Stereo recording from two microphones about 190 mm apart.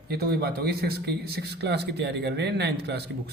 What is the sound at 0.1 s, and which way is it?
A man's voice, 55° right (ahead or behind).